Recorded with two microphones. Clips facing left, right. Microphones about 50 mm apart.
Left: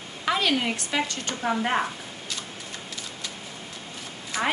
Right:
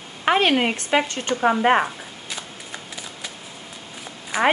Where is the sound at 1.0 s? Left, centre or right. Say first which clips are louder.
Right 3 dB; right.